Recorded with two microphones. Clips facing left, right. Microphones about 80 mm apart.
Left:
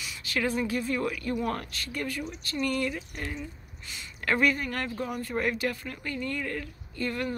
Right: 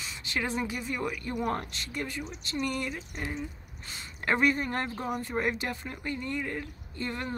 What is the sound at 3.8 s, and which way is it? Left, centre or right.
Speech, right.